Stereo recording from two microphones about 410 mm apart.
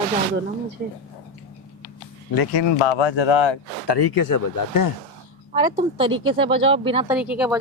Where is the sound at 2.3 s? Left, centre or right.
Left.